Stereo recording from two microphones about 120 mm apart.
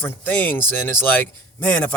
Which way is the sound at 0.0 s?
15° left (ahead or behind).